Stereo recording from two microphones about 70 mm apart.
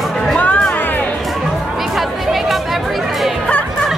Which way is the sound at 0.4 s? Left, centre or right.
Centre.